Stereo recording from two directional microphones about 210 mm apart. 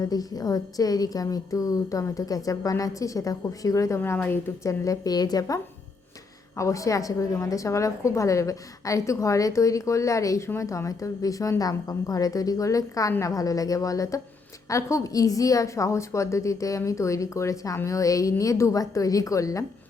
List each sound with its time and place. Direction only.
0.0 s a woman's voice: 15° left (ahead or behind)
6.6 s a woman's voice: 15° left (ahead or behind)